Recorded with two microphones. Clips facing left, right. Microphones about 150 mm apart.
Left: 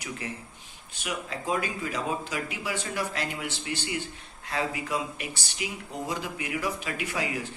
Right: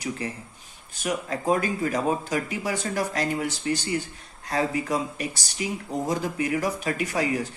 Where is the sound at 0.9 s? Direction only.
45° right (ahead or behind).